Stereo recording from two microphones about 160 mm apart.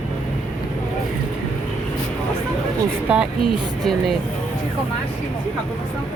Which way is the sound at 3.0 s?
10° right (ahead or behind).